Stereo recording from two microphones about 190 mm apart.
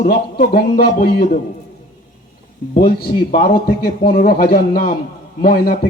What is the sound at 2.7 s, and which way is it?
A man's voice, 50° left (ahead or behind).